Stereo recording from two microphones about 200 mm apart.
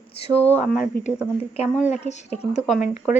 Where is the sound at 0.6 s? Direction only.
5° right (ahead or behind).